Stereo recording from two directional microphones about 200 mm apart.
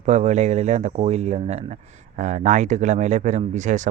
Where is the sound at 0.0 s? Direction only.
35° right (ahead or behind).